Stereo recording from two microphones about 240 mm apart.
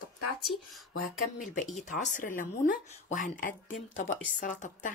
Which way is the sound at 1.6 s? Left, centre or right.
Left.